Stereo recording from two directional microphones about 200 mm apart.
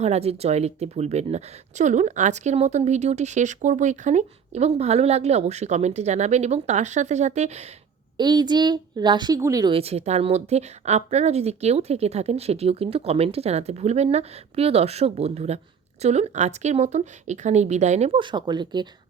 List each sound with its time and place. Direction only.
0.0 s a woman's voice: 30° right (ahead or behind)
8.2 s a woman's voice: 20° right (ahead or behind)